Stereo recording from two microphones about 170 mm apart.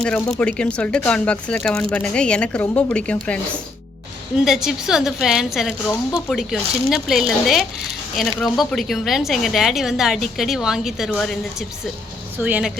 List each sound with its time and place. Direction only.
0.0 s speech: 5° left (ahead or behind)
4.4 s a woman's voice: centre (ahead or behind)
5.9 s speech: 20° left (ahead or behind)
6.2 s a woman's voice: centre (ahead or behind)
12.4 s speech: 10° right (ahead or behind)